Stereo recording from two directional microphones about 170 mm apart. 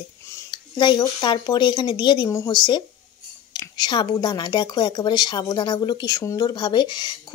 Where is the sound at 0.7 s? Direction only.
25° left (ahead or behind).